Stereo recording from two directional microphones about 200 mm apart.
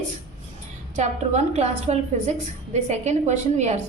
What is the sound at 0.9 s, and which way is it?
A woman's voice, 35° right (ahead or behind).